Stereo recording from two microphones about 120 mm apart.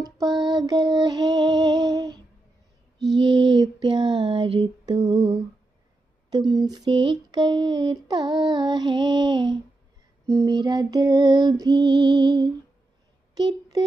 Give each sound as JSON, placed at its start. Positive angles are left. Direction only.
{"t": 0.0, "sound": "female singing", "side_deg": -35}
{"t": 3.2, "sound": "a sound", "side_deg": -45}
{"t": 6.5, "sound": "female singing", "side_deg": -35}
{"t": 13.3, "sound": "speech", "side_deg": -35}